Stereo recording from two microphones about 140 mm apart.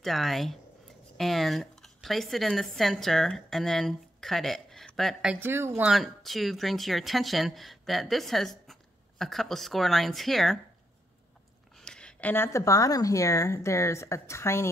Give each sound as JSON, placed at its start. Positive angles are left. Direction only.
{"t": 0.0, "sound": "speech", "side_deg": 0}
{"t": 5.3, "sound": "speech", "side_deg": -15}
{"t": 5.9, "sound": "speech", "side_deg": 0}
{"t": 11.7, "sound": "speech", "side_deg": 5}